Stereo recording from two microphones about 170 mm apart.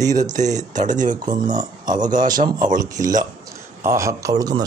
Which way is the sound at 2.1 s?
50° right (ahead or behind).